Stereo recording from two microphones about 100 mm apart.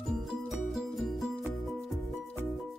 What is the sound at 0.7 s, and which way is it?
Music, centre (ahead or behind).